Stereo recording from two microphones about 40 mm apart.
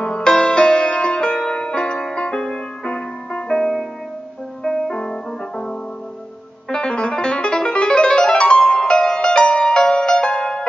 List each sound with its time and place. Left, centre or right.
0.0 s music: left
3.5 s music: centre